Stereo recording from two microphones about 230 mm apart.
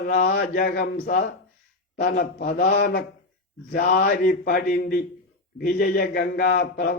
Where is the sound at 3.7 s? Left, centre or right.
Left.